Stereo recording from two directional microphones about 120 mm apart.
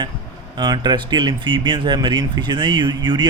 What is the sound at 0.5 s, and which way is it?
Speech, 35° right (ahead or behind).